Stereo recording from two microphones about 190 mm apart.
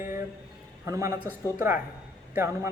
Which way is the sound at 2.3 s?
15° right (ahead or behind).